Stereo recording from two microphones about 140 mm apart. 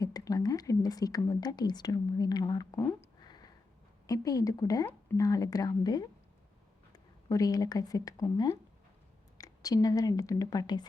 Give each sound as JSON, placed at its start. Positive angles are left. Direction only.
{"t": 0.0, "sound": "a woman's voice", "side_deg": 25}
{"t": 4.0, "sound": "a woman's voice", "side_deg": 25}
{"t": 4.9, "sound": "speech", "side_deg": 15}
{"t": 5.2, "sound": "a woman's voice", "side_deg": 25}